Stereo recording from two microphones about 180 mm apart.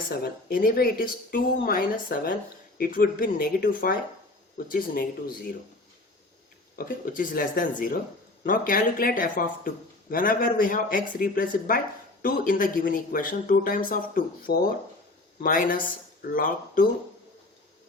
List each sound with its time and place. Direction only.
0.1 s speech: 55° left (ahead or behind)
6.7 s speech: 55° left (ahead or behind)